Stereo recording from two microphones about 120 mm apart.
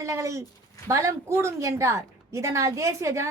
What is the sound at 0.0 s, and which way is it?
A woman's voice, 25° right (ahead or behind).